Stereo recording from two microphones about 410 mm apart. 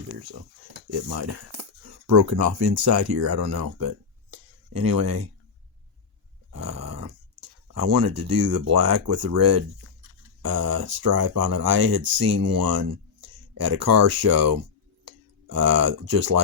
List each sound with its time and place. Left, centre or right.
1.1 s speech: right
4.3 s a sound: right
6.5 s dog: right
7.7 s speech: right
13.2 s a sound: right
14.1 s speech: right